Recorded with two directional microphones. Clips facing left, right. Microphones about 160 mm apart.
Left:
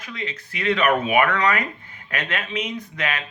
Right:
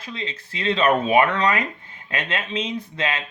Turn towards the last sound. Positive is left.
turn(degrees=-25)  # may be behind; listen again after turning